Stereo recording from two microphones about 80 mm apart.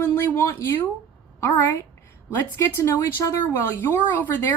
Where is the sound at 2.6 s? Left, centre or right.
Left.